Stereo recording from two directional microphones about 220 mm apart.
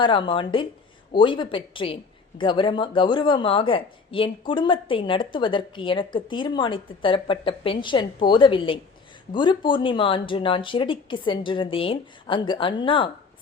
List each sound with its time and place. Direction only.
0.0 s speech: 20° left (ahead or behind)